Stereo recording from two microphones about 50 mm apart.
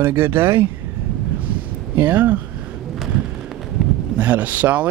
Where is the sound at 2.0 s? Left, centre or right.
Right.